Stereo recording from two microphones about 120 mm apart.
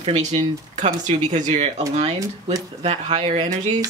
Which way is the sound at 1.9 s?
65° right (ahead or behind).